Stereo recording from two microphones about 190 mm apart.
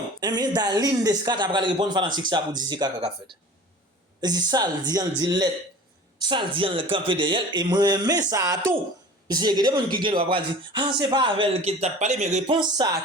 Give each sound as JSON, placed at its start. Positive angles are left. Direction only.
{"t": 0.2, "sound": "speech", "side_deg": -20}
{"t": 12.5, "sound": "speech", "side_deg": -20}